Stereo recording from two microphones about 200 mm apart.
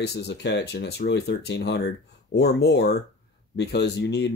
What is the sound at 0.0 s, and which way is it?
Speech, 55° left (ahead or behind).